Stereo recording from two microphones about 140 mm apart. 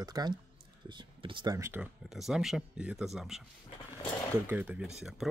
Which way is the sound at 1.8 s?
Centre (ahead or behind).